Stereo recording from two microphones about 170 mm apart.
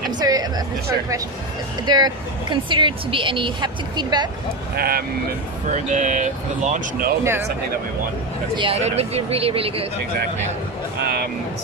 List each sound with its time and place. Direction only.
0.2 s music: 20° right (ahead or behind)
1.9 s speech: 25° right (ahead or behind)
4.7 s speech: 60° right (ahead or behind)
5.7 s speech: 45° right (ahead or behind)
8.5 s speech: 35° right (ahead or behind)
11.0 s speech: 65° right (ahead or behind)